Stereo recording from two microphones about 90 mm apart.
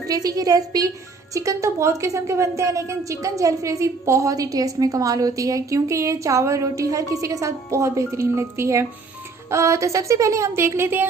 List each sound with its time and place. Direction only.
0.0 s a woman's voice: 45° right (ahead or behind); by 11.1 s 25° right (ahead or behind)